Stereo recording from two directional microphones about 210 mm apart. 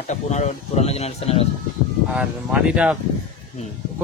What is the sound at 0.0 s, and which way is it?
Speech, 30° left (ahead or behind).